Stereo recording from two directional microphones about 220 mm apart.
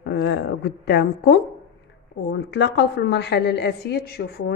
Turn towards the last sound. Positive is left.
turn(degrees=45)  # may be behind; listen again after turning